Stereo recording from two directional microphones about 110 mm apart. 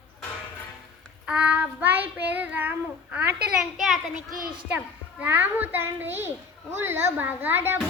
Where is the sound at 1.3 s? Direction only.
10° right (ahead or behind).